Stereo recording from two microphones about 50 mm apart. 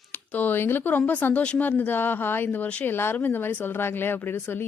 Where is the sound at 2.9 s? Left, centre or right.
Left.